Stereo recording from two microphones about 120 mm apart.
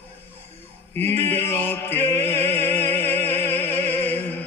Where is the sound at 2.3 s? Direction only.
20° left (ahead or behind).